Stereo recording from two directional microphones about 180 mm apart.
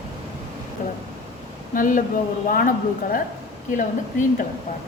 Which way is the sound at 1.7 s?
50° left (ahead or behind).